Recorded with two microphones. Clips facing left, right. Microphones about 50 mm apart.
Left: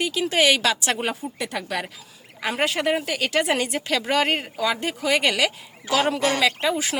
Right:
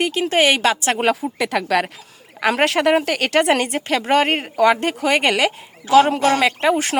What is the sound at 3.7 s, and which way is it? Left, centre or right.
Speech, right.